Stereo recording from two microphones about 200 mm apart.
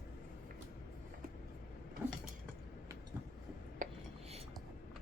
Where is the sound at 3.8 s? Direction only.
40° right (ahead or behind).